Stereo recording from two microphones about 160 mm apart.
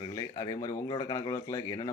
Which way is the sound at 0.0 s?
25° left (ahead or behind).